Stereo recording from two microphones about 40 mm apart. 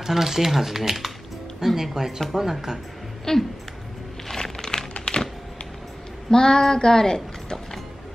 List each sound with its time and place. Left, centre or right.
0.0 s speech: centre
3.3 s speech: centre
4.3 s a sound: centre
6.3 s speech: centre